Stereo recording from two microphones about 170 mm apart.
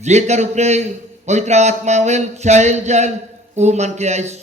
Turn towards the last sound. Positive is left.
turn(degrees=-40)  # may be behind; listen again after turning